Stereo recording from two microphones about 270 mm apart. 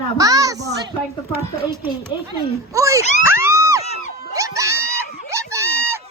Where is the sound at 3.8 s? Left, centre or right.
Left.